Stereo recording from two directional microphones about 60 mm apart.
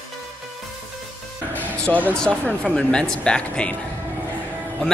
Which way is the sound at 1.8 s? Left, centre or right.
Left.